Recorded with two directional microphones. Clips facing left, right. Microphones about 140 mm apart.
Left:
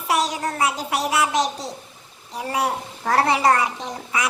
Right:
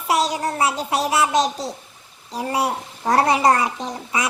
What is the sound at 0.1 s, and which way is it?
A woman's voice, 25° right (ahead or behind).